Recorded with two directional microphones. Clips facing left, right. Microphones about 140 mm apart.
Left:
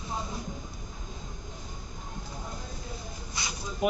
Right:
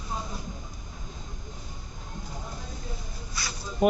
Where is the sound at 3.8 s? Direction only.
40° right (ahead or behind).